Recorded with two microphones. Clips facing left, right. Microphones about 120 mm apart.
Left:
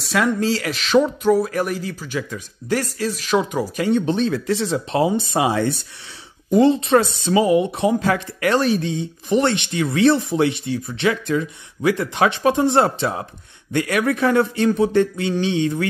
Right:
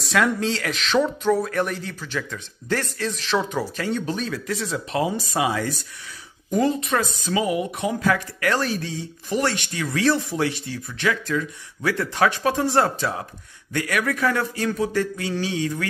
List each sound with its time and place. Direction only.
0.0 s a woman's voice: centre (ahead or behind); by 15.9 s 25° left (ahead or behind)